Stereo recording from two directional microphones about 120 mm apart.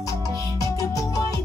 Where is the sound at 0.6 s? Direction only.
30° left (ahead or behind).